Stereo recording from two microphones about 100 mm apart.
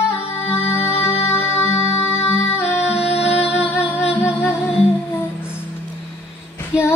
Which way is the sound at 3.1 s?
90° left.